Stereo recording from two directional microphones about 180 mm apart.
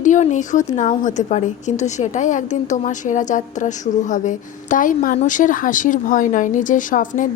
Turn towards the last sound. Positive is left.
turn(degrees=45)  # may be behind; listen again after turning